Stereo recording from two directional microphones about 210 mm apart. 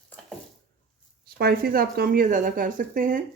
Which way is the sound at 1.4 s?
50° right (ahead or behind).